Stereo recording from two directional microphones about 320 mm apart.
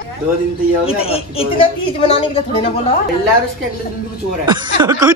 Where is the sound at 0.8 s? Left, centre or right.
Centre.